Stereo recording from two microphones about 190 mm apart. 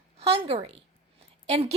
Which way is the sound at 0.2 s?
30° right (ahead or behind).